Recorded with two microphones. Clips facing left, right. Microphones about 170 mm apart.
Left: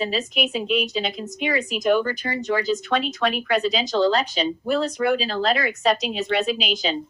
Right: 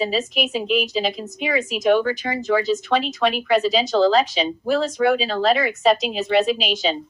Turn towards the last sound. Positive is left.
turn(degrees=0)  # may be behind; listen again after turning